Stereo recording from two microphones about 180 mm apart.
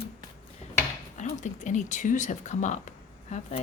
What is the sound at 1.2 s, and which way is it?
Speech, 40° left (ahead or behind).